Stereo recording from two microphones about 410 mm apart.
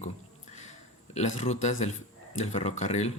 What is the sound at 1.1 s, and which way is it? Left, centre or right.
Speech, centre.